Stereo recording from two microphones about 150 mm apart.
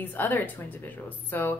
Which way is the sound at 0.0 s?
10° left (ahead or behind).